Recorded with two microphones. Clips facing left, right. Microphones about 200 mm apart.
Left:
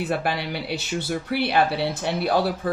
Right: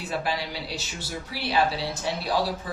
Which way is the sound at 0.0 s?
60° left (ahead or behind).